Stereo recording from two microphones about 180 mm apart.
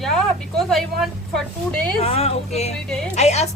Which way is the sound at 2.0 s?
35° left (ahead or behind).